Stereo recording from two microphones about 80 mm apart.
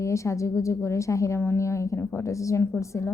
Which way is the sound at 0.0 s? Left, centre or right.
Left.